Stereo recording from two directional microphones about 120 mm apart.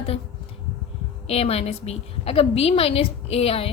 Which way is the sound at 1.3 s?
55° left (ahead or behind).